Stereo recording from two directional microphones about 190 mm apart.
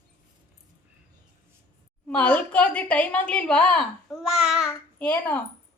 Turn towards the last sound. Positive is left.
turn(degrees=10)  # may be behind; listen again after turning